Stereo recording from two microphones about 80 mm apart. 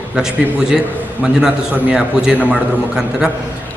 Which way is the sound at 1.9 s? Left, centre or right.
Centre.